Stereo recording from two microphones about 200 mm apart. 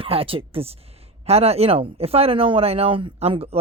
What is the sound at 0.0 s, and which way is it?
Speech, 30° right (ahead or behind).